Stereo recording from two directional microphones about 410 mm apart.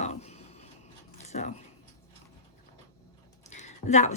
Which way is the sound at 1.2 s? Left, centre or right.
Centre.